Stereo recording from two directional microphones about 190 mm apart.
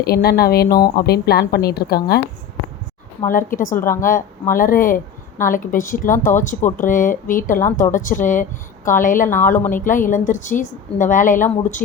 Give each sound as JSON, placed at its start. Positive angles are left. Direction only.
{"t": 0.0, "sound": "a woman's voice", "side_deg": 55}
{"t": 0.7, "sound": "speech", "side_deg": 20}
{"t": 1.0, "sound": "a woman's voice", "side_deg": 55}
{"t": 3.3, "sound": "a woman's voice", "side_deg": 45}